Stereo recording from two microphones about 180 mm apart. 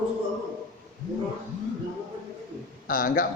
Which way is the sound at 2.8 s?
50° left (ahead or behind).